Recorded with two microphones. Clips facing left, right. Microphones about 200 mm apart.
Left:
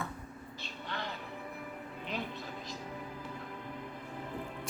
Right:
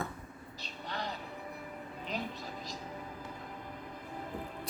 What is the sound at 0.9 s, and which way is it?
Music, 40° right (ahead or behind).